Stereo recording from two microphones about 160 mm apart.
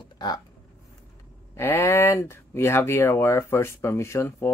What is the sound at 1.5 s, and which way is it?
Speech, 15° left (ahead or behind).